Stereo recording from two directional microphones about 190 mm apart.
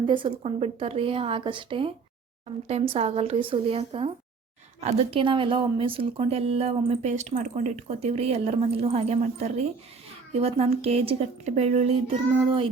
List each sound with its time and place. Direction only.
0.0 s a woman's voice: 25° right (ahead or behind)